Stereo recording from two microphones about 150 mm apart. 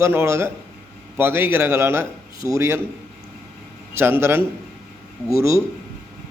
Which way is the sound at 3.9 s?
15° right (ahead or behind).